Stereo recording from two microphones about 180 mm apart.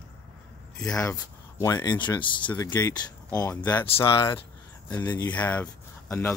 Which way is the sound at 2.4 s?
15° left (ahead or behind).